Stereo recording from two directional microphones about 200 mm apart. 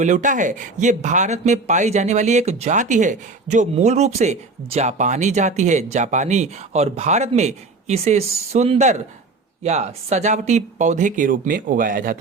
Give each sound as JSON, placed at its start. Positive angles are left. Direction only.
{"t": 0.0, "sound": "speech", "side_deg": -40}